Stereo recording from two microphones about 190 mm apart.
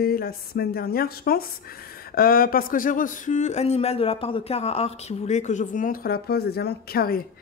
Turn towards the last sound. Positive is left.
turn(degrees=55)  # may be behind; listen again after turning